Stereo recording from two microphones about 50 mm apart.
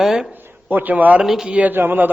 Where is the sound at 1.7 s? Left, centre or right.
Right.